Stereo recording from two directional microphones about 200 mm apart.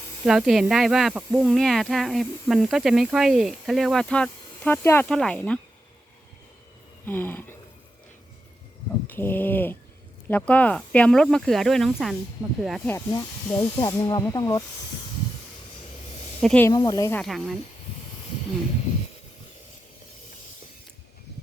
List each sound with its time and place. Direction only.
0.3 s speech: centre (ahead or behind)
7.0 s speech: 10° left (ahead or behind)
9.0 s speech: 10° left (ahead or behind)
12.9 s speech: 15° left (ahead or behind)
16.4 s speech: 5° left (ahead or behind)
16.6 s speech: 20° left (ahead or behind)
17.2 s speech: centre (ahead or behind)